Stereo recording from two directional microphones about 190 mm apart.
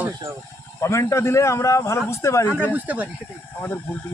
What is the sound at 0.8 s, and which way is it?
A man's voice, 15° left (ahead or behind).